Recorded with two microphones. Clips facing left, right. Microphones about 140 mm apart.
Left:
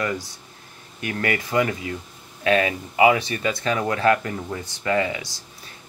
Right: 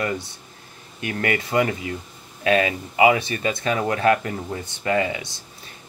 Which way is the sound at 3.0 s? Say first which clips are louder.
Even; 25° right (ahead or behind).